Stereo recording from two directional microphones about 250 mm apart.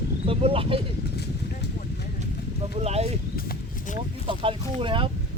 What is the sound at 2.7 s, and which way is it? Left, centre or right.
Speech, right.